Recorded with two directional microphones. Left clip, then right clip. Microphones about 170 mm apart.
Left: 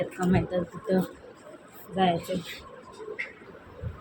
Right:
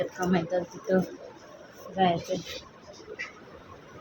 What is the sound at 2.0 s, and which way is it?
Speech, 10° left (ahead or behind).